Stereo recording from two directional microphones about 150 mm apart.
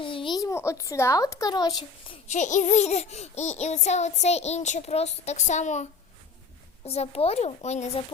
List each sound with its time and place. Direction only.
0.0 s a child's voice: 35° left (ahead or behind)
2.2 s speech: 50° left (ahead or behind)